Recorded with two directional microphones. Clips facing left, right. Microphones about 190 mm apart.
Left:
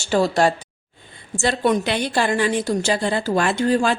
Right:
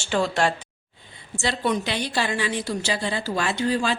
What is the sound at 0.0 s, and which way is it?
A woman's voice, 40° left (ahead or behind).